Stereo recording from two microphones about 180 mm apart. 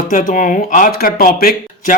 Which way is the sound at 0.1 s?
45° left (ahead or behind).